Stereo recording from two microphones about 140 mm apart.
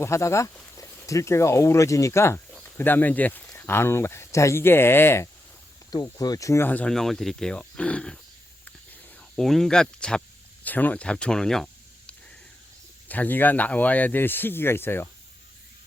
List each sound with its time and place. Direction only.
0.0 s speech: 20° left (ahead or behind)
5.9 s speech: 30° left (ahead or behind); by 8.2 s 5° left (ahead or behind)
8.6 s snake: 5° left (ahead or behind)
13.1 s speech: 10° left (ahead or behind)